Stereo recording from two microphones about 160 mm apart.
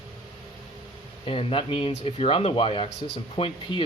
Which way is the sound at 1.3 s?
35° left (ahead or behind).